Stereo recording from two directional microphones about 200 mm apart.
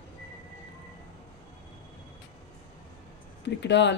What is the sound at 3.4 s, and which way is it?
Speech, 60° left (ahead or behind).